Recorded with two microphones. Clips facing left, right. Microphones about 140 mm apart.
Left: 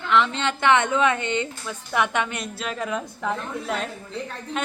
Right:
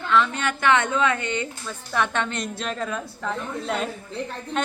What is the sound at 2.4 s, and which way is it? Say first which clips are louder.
Child singing: right 1 dB; 5° left (ahead or behind).